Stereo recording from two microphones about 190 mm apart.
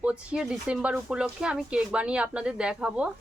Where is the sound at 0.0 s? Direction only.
5° right (ahead or behind).